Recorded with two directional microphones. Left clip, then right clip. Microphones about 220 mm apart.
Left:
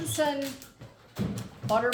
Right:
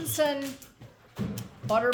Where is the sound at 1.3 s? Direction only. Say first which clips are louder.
Right 1 dB; 40° right (ahead or behind).